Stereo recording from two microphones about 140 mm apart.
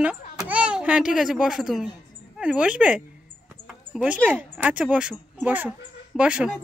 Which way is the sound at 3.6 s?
5° right (ahead or behind).